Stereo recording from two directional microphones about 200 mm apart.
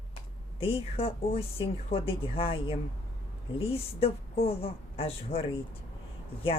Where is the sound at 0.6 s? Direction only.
30° left (ahead or behind).